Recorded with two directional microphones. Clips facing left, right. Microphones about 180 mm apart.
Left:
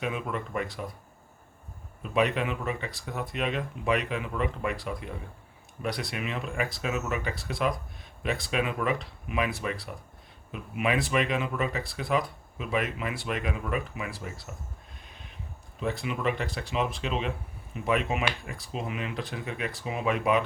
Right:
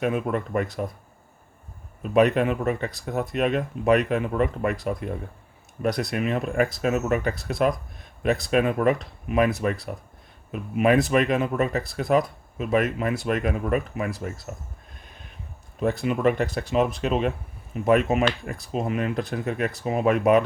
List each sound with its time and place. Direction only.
0.0 s speech: 50° right (ahead or behind)
2.0 s speech: 45° right (ahead or behind)
15.8 s speech: 45° right (ahead or behind)